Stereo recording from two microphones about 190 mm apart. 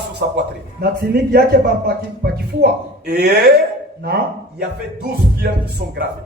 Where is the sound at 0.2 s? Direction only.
50° right (ahead or behind).